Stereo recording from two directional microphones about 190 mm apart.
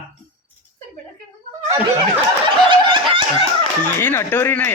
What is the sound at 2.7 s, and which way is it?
Snicker, 25° right (ahead or behind).